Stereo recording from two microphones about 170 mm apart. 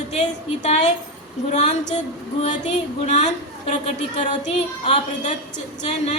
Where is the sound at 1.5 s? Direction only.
45° left (ahead or behind).